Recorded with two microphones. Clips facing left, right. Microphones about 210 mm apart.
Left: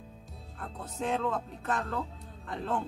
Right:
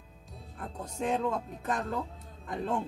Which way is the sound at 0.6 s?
15° right (ahead or behind).